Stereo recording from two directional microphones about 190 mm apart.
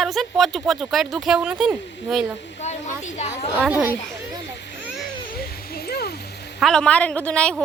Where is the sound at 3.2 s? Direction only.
35° left (ahead or behind).